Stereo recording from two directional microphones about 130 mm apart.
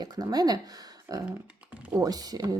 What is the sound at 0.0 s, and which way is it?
Speech, 30° right (ahead or behind).